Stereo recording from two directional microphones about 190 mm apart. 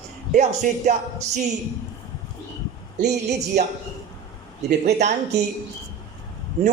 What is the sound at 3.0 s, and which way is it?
Speech, 65° right (ahead or behind).